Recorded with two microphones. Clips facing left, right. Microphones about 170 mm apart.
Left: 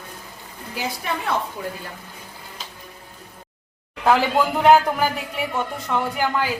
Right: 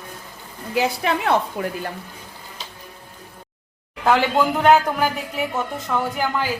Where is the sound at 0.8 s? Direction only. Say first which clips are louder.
Right 7 dB; 75° right (ahead or behind).